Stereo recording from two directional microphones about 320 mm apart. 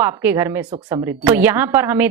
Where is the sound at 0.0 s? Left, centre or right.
Centre.